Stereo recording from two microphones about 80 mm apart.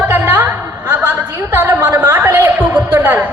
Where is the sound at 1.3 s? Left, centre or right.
Right.